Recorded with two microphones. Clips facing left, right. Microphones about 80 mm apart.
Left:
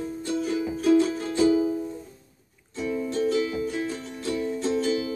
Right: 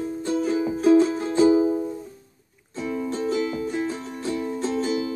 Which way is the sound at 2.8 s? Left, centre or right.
Right.